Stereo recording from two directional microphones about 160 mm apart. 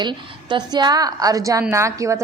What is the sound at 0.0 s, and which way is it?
A woman's voice, 30° right (ahead or behind).